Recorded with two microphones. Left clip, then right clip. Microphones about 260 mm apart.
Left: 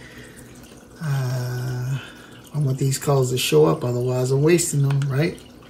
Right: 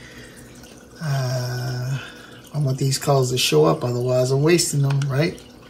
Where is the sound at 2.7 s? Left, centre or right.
Centre.